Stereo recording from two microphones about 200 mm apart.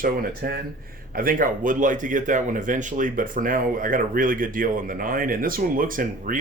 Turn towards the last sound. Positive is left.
turn(degrees=-45)  # may be behind; listen again after turning